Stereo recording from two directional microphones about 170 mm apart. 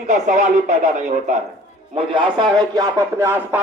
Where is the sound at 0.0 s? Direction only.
45° right (ahead or behind).